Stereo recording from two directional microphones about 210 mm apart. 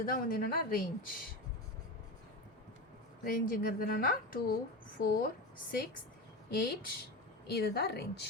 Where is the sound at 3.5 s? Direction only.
45° left (ahead or behind).